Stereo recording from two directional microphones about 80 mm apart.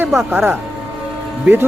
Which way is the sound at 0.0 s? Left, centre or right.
Right.